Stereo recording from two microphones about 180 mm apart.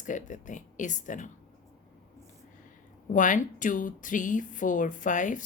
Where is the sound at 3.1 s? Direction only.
45° left (ahead or behind).